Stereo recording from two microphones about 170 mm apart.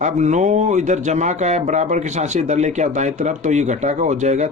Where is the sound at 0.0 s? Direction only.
45° right (ahead or behind).